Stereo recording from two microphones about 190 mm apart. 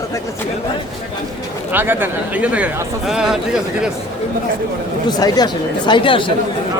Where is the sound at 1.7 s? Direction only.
10° right (ahead or behind).